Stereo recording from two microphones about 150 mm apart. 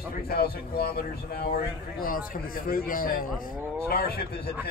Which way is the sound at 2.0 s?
70° left (ahead or behind).